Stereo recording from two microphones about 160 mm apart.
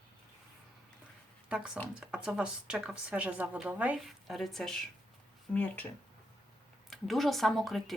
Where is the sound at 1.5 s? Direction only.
5° right (ahead or behind).